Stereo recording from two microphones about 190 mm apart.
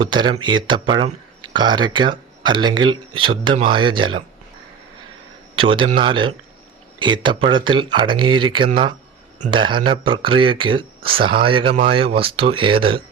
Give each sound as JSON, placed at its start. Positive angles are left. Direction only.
{"t": 0.0, "sound": "speech", "side_deg": -25}
{"t": 5.5, "sound": "speech", "side_deg": -25}